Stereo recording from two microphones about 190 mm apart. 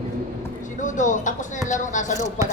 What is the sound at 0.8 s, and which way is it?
A woman's voice, 40° left (ahead or behind).